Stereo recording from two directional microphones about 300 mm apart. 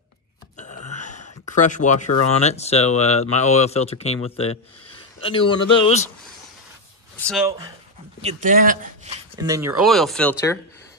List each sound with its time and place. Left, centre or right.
0.9 s a sound: left
1.6 s speech: left
7.2 s speech: centre
8.2 s speech: right
9.4 s speech: centre